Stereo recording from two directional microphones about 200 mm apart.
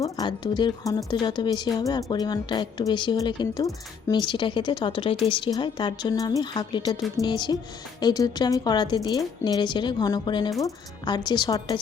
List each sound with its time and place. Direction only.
0.0 s speech: 20° left (ahead or behind)